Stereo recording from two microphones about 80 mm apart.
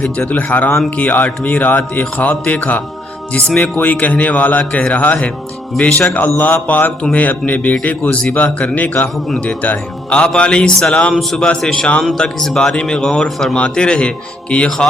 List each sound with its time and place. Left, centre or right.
0.0 s a man's voice: centre
5.7 s a man's voice: centre
6.1 s a man's voice: centre